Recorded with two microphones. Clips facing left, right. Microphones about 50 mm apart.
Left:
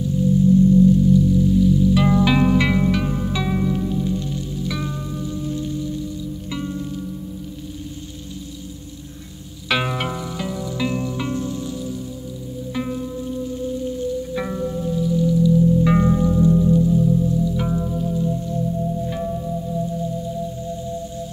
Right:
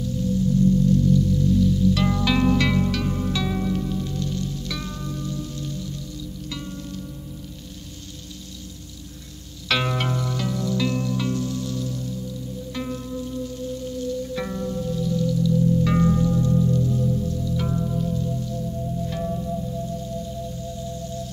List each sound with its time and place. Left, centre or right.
0.0 s music: centre
9.7 s music: centre
19.0 s singing bowl: centre